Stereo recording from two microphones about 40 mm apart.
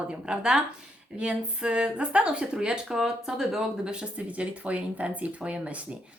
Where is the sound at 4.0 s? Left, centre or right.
Right.